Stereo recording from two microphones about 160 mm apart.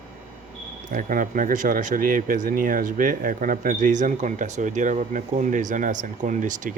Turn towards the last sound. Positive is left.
turn(degrees=-55)  # may be behind; listen again after turning